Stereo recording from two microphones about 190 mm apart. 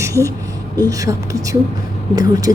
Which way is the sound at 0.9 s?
15° right (ahead or behind).